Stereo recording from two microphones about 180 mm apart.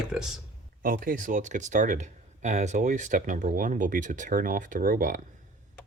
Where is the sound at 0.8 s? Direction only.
50° right (ahead or behind).